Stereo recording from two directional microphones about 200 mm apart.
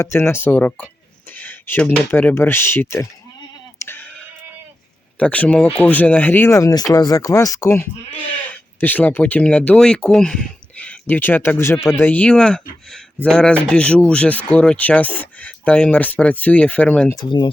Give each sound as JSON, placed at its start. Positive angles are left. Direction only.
{"t": 0.0, "sound": "speech", "side_deg": 10}
{"t": 3.8, "sound": "bleat", "side_deg": 10}
{"t": 5.2, "sound": "speech", "side_deg": 5}
{"t": 17.2, "sound": "speech", "side_deg": 25}